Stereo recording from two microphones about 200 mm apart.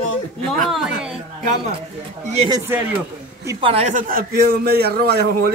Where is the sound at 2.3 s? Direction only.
30° right (ahead or behind).